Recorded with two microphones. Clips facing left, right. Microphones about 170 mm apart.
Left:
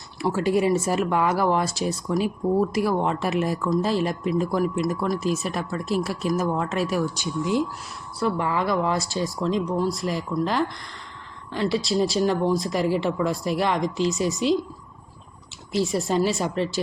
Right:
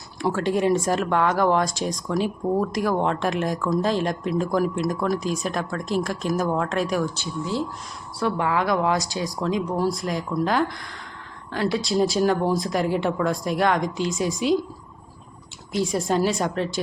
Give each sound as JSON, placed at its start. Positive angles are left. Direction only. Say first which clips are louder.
{"t": 0.2, "sound": "speech", "louder": "left 1 dB", "side_deg": 5}
{"t": 7.2, "sound": "speech", "louder": "left 3 dB", "side_deg": 15}
{"t": 8.2, "sound": "speech", "louder": "right 1 dB", "side_deg": 0}
{"t": 15.7, "sound": "speech", "louder": "even", "side_deg": 0}